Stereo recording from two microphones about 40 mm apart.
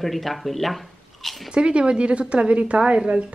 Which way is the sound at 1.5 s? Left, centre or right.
Right.